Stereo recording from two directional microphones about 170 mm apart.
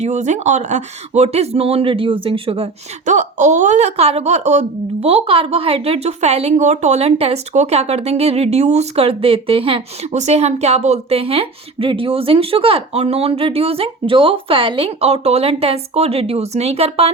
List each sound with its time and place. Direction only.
0.0 s a woman's voice: 45° right (ahead or behind)
3.1 s a woman's voice: 45° right (ahead or behind)